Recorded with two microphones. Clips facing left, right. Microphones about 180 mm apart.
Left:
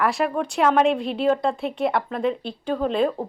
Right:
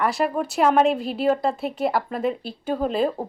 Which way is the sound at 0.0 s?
Centre (ahead or behind).